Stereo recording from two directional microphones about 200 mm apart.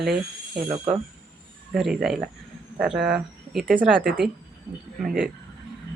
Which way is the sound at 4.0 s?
50° right (ahead or behind).